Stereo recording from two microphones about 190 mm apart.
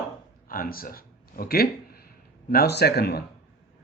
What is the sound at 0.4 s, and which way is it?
Speech, 50° left (ahead or behind).